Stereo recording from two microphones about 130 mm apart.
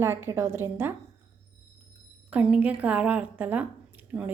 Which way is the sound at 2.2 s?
10° right (ahead or behind).